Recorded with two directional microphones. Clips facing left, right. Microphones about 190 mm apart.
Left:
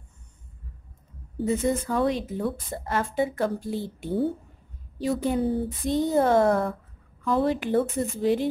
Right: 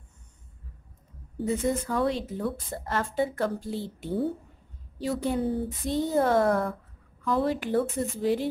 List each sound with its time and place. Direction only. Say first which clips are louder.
1.4 s speech: left 2 dB; 25° left (ahead or behind)
2.7 s speech: left 2 dB; 10° left (ahead or behind)